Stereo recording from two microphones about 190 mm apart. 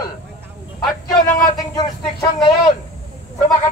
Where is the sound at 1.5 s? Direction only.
20° left (ahead or behind).